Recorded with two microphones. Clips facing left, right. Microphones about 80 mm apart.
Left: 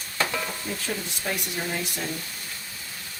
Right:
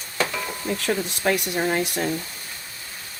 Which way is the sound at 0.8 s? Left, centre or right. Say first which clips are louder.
Right 10 dB; right.